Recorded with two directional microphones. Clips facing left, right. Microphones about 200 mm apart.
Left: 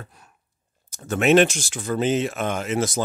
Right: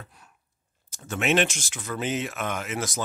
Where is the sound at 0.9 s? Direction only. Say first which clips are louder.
Left 7 dB; 40° left (ahead or behind).